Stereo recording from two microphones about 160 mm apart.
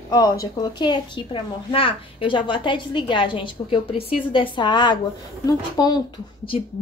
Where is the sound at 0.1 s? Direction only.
25° left (ahead or behind).